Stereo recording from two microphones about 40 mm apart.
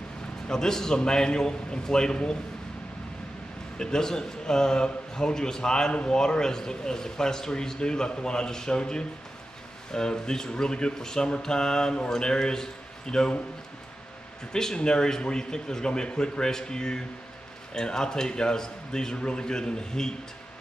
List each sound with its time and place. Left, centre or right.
0.5 s a man's voice: centre
3.7 s a man's voice: centre
14.5 s a man's voice: centre